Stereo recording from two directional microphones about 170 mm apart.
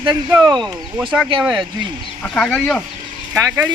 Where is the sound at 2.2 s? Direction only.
5° left (ahead or behind).